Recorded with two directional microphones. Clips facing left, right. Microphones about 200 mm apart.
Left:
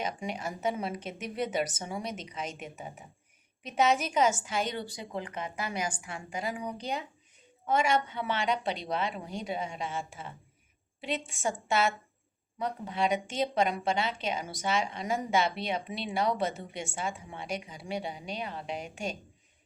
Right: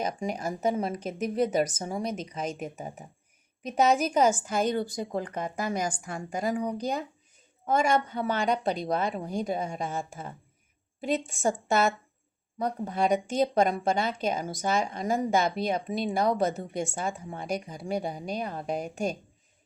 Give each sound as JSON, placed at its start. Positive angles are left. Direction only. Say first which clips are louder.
{"t": 0.0, "sound": "a woman's voice", "louder": "right 4 dB", "side_deg": -40}